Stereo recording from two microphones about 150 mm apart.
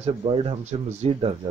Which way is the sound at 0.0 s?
40° right (ahead or behind).